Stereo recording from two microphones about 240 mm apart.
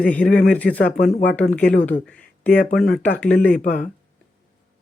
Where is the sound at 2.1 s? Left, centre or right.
Centre.